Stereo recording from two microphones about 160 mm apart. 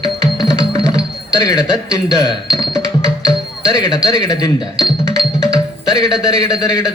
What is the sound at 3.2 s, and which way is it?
Speech, 25° left (ahead or behind).